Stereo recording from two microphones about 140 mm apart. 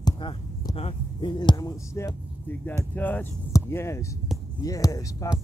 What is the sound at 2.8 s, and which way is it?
Speech, 10° left (ahead or behind).